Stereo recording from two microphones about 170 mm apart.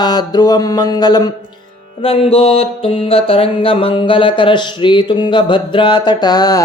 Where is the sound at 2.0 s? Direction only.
35° left (ahead or behind).